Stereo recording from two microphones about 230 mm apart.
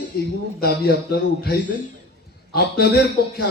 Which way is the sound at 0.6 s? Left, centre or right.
Left.